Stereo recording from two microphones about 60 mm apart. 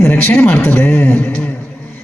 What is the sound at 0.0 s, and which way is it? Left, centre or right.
A woman's voice, left.